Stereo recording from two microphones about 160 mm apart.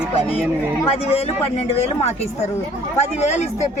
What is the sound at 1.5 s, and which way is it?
Speech, 40° left (ahead or behind).